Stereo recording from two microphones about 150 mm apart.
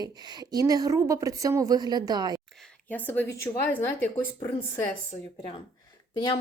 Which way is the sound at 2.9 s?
15° left (ahead or behind).